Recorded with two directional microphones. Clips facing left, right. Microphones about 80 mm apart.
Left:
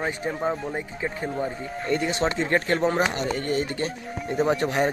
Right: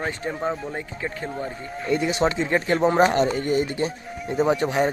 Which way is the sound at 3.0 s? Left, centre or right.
Right.